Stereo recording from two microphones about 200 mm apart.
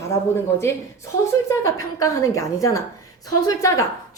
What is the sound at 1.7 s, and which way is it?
A woman's voice, 15° left (ahead or behind).